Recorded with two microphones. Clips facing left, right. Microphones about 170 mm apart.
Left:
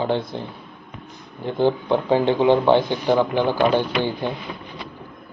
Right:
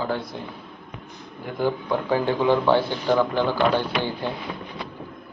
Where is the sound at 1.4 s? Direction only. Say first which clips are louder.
Left 5 dB; 25° left (ahead or behind).